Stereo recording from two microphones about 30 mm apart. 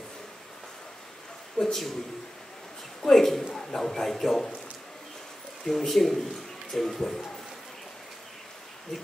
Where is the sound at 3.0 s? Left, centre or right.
Centre.